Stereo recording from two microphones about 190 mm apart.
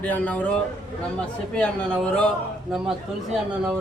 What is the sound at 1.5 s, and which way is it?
Speech, 5° left (ahead or behind).